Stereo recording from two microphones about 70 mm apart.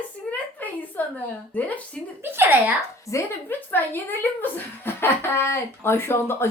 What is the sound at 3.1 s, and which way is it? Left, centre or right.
Speech, left.